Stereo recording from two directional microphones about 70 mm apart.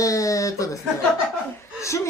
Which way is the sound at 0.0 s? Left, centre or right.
Left.